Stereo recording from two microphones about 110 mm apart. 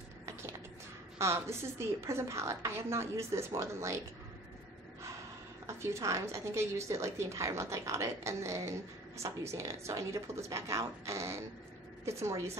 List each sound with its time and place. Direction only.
1.1 s a woman's voice: 25° right (ahead or behind)
5.7 s a woman's voice: 25° right (ahead or behind)